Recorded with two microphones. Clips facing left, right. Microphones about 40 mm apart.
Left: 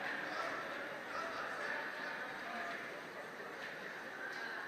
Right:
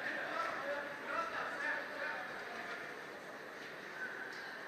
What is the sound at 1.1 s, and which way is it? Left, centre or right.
Bow-wow, right.